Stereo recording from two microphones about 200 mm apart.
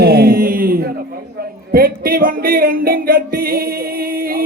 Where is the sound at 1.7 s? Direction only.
45° right (ahead or behind).